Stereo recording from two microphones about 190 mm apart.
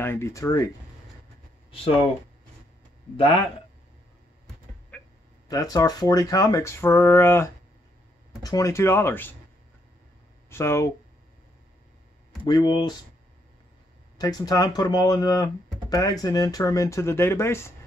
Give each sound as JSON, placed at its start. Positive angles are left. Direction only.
{"t": 0.0, "sound": "speech", "side_deg": 15}
{"t": 4.9, "sound": "a sound", "side_deg": 10}
{"t": 5.5, "sound": "speech", "side_deg": 20}
{"t": 10.5, "sound": "speech", "side_deg": 15}
{"t": 12.4, "sound": "speech", "side_deg": 20}
{"t": 14.1, "sound": "speech", "side_deg": 20}